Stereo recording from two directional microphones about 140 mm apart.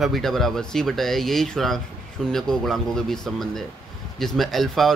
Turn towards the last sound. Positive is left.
turn(degrees=0)  # may be behind; listen again after turning